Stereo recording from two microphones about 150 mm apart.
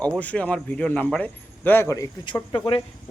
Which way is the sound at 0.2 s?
10° left (ahead or behind).